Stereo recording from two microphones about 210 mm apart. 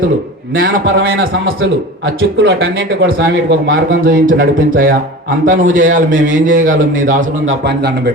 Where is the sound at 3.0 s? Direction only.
45° right (ahead or behind).